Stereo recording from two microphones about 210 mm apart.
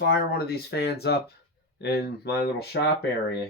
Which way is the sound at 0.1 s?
50° left (ahead or behind).